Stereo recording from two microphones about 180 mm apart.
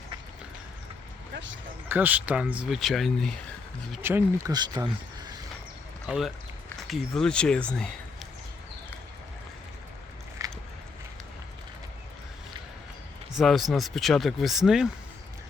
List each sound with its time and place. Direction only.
1.9 s speech: 10° right (ahead or behind)
4.0 s speech: 10° right (ahead or behind)
6.1 s speech: centre (ahead or behind)
10.4 s a sound: 15° right (ahead or behind)
13.3 s speech: centre (ahead or behind)